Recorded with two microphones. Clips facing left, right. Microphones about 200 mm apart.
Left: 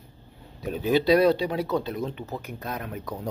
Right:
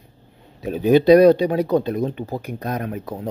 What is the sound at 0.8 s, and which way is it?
Speech, 55° right (ahead or behind).